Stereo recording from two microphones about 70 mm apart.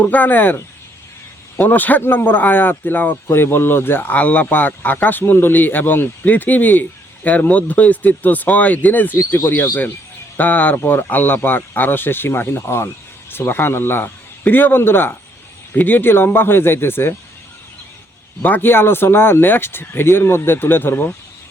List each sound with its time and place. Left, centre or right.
0.0 s speech: left
1.5 s speech: left
10.3 s speech: left
18.4 s speech: left